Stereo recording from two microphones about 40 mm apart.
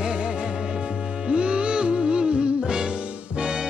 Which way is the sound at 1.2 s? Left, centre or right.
Right.